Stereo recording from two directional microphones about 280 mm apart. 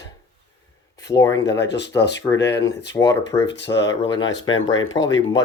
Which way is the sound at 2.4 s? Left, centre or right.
Left.